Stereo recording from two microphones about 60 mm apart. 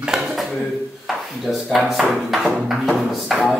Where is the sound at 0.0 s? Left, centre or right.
Centre.